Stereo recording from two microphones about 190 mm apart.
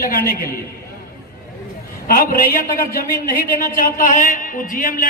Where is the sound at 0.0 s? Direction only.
50° left (ahead or behind).